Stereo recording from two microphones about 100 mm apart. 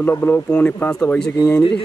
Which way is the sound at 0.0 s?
15° left (ahead or behind).